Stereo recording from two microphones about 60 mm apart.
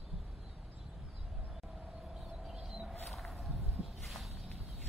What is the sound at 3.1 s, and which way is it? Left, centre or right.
Wild animals, centre.